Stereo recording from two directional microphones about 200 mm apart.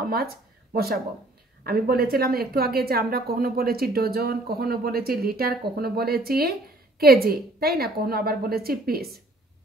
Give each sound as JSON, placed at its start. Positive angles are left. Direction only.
{"t": 0.0, "sound": "speech", "side_deg": -50}
{"t": 1.7, "sound": "a woman's voice", "side_deg": -50}